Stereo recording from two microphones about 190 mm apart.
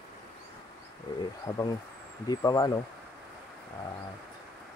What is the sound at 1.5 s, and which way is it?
Speech, 15° left (ahead or behind).